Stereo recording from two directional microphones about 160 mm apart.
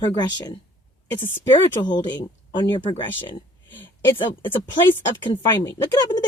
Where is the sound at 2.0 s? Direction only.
30° left (ahead or behind).